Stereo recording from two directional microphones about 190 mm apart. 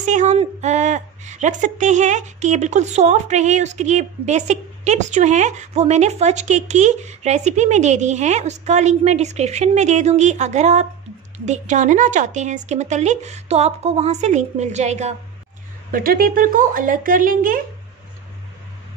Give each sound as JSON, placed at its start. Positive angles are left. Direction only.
{"t": 0.0, "sound": "a woman's voice", "side_deg": -40}
{"t": 15.9, "sound": "speech", "side_deg": -50}